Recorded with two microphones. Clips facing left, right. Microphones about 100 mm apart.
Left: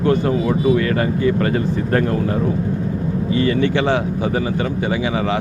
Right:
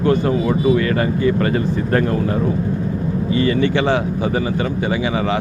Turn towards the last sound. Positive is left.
turn(degrees=-30)  # may be behind; listen again after turning